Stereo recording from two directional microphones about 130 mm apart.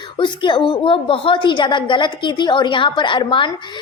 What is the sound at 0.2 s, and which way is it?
A woman's voice, 35° left (ahead or behind).